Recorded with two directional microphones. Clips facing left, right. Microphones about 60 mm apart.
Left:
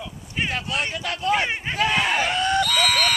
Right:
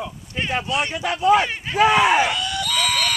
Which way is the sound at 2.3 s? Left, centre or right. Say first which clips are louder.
Left 4 dB; left.